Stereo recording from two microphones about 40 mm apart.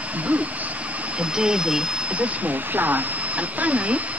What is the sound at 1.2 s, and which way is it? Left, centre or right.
Speech, right.